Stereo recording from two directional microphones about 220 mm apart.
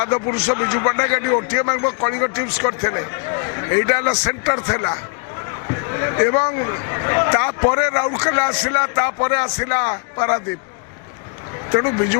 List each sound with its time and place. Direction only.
0.0 s speech: 20° left (ahead or behind)
6.0 s speech: 20° left (ahead or behind)
11.7 s speech: 20° left (ahead or behind)